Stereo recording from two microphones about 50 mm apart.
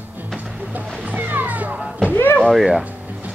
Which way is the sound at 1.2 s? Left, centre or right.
Right.